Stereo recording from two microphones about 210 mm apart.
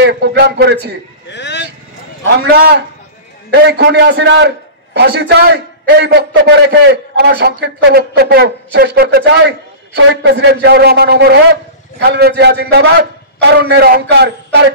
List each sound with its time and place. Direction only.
0.0 s a man's voice: 50° right (ahead or behind)
1.3 s vehicle: 55° left (ahead or behind)
2.5 s a man's voice: 45° right (ahead or behind)